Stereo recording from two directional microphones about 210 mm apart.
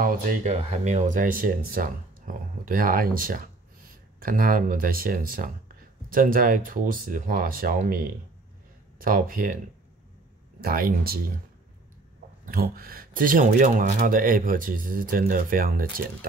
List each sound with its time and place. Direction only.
0.0 s speech: 40° right (ahead or behind)
10.6 s speech: 45° right (ahead or behind)
12.4 s speech: 45° right (ahead or behind)